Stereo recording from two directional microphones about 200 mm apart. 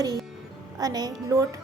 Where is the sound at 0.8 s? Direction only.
20° right (ahead or behind).